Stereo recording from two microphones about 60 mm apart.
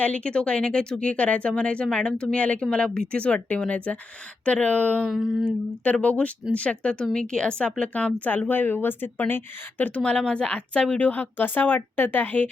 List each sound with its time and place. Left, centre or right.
0.0 s speech: left
5.0 s a sound: centre
5.5 s speech: left
10.0 s speech: centre